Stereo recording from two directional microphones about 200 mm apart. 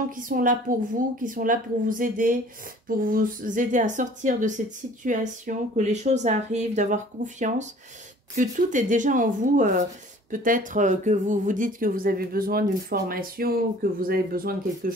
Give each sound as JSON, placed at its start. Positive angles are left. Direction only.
{"t": 0.1, "sound": "speech", "side_deg": -45}